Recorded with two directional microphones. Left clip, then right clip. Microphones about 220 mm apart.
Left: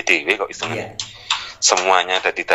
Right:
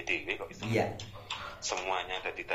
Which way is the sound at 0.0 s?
45° left (ahead or behind).